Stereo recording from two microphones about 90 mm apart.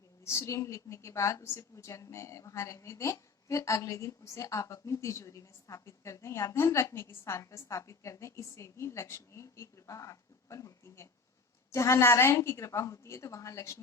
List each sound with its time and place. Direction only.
0.3 s a woman's voice: 35° left (ahead or behind)